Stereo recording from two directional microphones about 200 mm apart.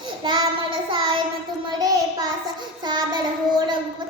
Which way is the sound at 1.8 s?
20° right (ahead or behind).